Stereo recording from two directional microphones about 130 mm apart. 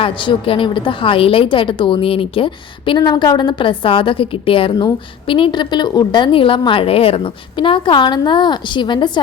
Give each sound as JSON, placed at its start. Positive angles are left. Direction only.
{"t": 0.0, "sound": "a woman's voice", "side_deg": 40}